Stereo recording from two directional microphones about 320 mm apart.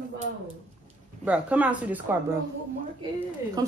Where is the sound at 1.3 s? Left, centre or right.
Centre.